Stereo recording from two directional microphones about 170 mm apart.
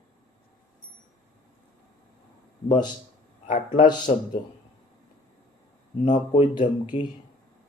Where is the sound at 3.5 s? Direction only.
45° left (ahead or behind).